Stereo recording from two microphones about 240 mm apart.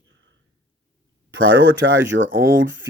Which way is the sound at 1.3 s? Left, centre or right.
Right.